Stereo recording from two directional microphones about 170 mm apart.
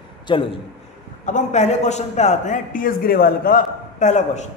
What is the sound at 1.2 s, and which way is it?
A man's voice, 45° left (ahead or behind).